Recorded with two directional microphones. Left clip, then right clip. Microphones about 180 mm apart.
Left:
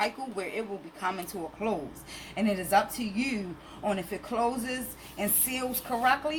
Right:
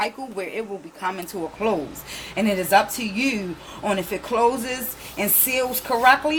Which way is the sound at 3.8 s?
30° right (ahead or behind).